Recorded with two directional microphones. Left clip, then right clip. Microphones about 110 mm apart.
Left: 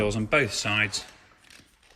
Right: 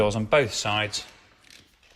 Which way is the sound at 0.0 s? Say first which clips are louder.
Right 4 dB; 70° right (ahead or behind).